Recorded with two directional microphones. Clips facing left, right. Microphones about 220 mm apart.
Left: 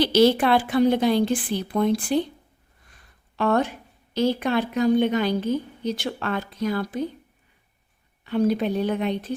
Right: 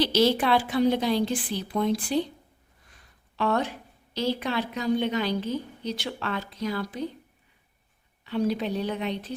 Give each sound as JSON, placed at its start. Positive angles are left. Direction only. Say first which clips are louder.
{"t": 0.0, "sound": "a woman's voice", "louder": "left 5 dB", "side_deg": 55}
{"t": 3.3, "sound": "a woman's voice", "louder": "left 4 dB", "side_deg": 50}
{"t": 8.2, "sound": "a woman's voice", "louder": "left 5 dB", "side_deg": 50}